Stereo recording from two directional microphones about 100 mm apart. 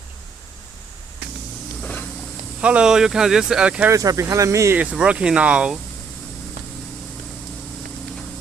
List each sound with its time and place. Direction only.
1.8 s a sound: 15° left (ahead or behind)
2.6 s speech: 10° right (ahead or behind)
3.8 s speech: 35° right (ahead or behind)
4.8 s speech: 10° right (ahead or behind)